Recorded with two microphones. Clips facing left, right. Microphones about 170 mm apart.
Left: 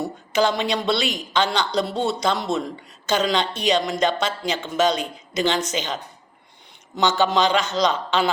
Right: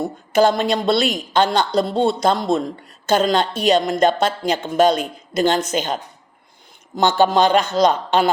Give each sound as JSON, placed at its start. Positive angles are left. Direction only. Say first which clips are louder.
{"t": 0.0, "sound": "a woman's voice", "louder": "right 5 dB", "side_deg": -50}